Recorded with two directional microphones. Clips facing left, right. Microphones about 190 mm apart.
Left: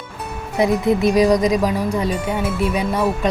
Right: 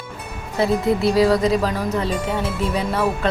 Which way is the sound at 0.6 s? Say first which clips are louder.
Left 2 dB; 15° left (ahead or behind).